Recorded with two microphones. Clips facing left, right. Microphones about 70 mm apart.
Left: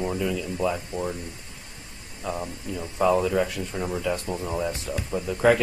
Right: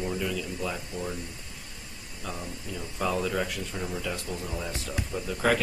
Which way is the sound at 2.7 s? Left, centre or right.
Left.